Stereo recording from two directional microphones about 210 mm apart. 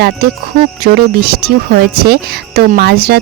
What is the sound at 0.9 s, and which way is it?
Speech, 45° right (ahead or behind).